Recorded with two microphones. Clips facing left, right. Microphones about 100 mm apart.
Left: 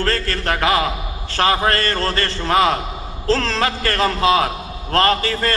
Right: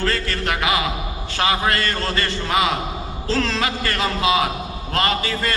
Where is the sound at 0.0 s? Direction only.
40° left (ahead or behind).